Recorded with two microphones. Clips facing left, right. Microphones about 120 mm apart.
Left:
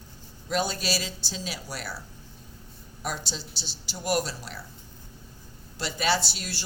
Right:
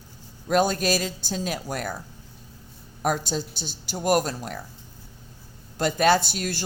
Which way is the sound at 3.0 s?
50° right (ahead or behind).